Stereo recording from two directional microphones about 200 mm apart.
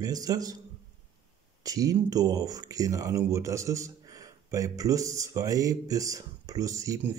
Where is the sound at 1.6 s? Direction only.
15° right (ahead or behind).